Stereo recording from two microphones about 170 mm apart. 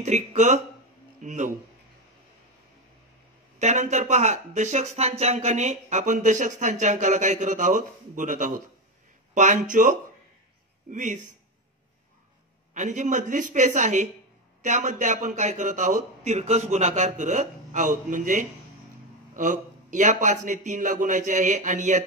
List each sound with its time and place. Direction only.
0.0 s speech: 45° right (ahead or behind)
3.5 s speech: 45° right (ahead or behind)
12.7 s speech: 45° right (ahead or behind)